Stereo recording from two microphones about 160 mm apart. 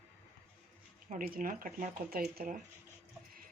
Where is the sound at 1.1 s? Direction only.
60° right (ahead or behind).